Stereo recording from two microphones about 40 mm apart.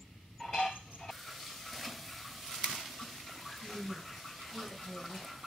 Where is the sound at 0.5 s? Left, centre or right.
Centre.